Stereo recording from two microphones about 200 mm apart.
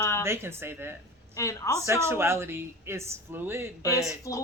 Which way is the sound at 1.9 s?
10° right (ahead or behind).